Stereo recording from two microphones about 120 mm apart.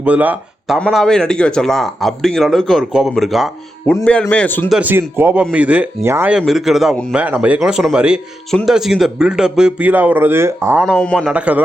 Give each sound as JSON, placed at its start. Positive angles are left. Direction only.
{"t": 0.0, "sound": "speech", "side_deg": -15}
{"t": 0.9, "sound": "speech", "side_deg": 0}
{"t": 4.0, "sound": "speech", "side_deg": 10}
{"t": 4.7, "sound": "speech", "side_deg": -15}
{"t": 6.4, "sound": "speech", "side_deg": 0}
{"t": 10.8, "sound": "speech", "side_deg": 5}
{"t": 11.3, "sound": "speech", "side_deg": -10}